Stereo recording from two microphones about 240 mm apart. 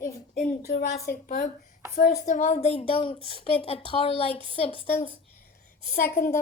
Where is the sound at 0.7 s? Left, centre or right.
Left.